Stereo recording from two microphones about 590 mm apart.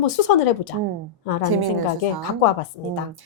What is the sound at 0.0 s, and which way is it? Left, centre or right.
Speech, left.